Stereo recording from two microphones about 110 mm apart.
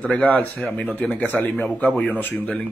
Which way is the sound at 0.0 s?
10° left (ahead or behind).